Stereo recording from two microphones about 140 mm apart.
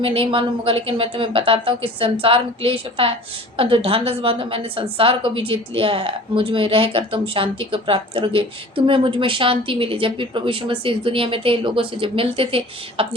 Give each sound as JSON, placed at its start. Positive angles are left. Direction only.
{"t": 0.0, "sound": "a woman's voice", "side_deg": -40}